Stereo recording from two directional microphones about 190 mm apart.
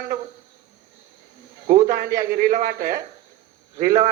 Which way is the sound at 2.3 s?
55° right (ahead or behind).